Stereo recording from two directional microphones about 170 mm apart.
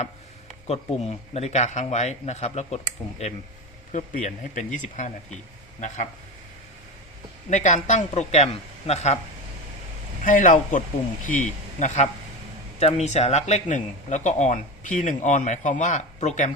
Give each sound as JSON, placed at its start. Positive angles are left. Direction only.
{"t": 0.7, "sound": "speech", "side_deg": 35}
{"t": 7.5, "sound": "speech", "side_deg": 45}
{"t": 10.2, "sound": "a man's voice", "side_deg": 50}